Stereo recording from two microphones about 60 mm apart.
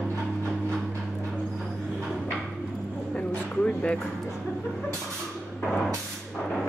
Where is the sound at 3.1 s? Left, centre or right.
Left.